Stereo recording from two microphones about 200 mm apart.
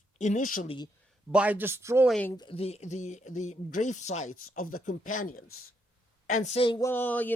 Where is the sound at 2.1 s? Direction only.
5° left (ahead or behind).